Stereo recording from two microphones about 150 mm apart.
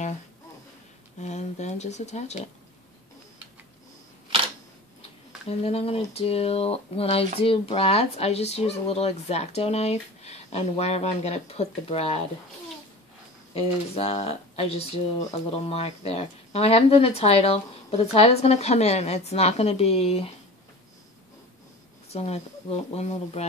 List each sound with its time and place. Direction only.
1.2 s speech: 50° left (ahead or behind)
5.5 s speech: 45° left (ahead or behind)
13.6 s speech: 40° left (ahead or behind)
22.1 s speech: 45° left (ahead or behind)